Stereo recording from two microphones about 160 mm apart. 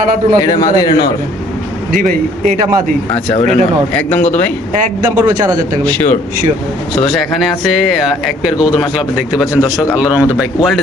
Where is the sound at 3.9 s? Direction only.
10° left (ahead or behind).